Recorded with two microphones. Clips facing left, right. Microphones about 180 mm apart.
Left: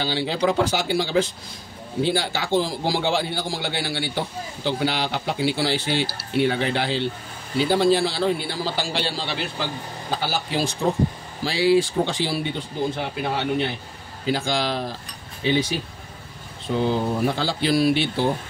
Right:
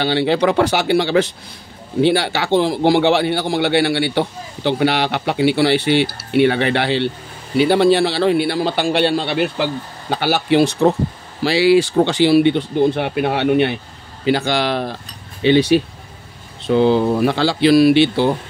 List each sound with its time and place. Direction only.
0.0 s a man's voice: 65° right (ahead or behind)
11.4 s a man's voice: 75° right (ahead or behind)